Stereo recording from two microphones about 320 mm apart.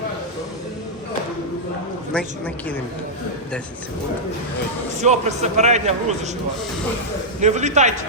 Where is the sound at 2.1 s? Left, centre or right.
Centre.